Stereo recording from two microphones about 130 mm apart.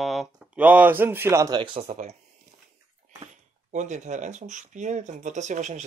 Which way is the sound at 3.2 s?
65° right (ahead or behind).